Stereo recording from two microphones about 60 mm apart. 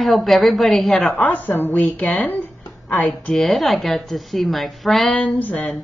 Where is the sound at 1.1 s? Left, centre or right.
Left.